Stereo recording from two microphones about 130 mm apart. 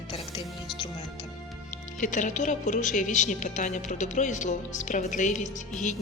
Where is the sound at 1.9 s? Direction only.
80° left.